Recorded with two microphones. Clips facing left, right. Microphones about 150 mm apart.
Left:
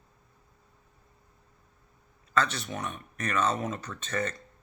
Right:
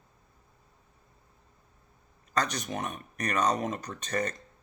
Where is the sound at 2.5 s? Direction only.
45° right (ahead or behind).